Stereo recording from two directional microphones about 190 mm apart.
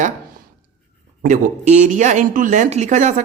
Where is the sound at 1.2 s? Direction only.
40° right (ahead or behind).